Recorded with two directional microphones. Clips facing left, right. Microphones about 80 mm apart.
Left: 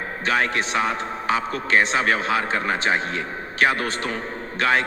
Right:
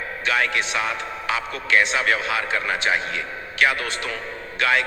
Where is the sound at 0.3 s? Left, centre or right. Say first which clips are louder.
Left 1 dB; left.